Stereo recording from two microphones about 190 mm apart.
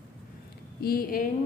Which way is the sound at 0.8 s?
50° left (ahead or behind).